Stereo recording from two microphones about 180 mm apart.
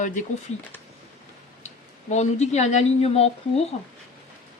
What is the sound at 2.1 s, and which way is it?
A man's voice, 40° left (ahead or behind).